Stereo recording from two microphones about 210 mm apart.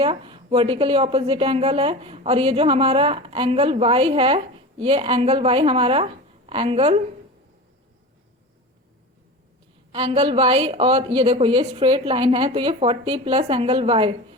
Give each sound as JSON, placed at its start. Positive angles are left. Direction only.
{"t": 0.0, "sound": "a woman's voice", "side_deg": -25}
{"t": 9.9, "sound": "a woman's voice", "side_deg": -30}